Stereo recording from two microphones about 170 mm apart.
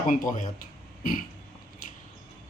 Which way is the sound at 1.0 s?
55° left (ahead or behind).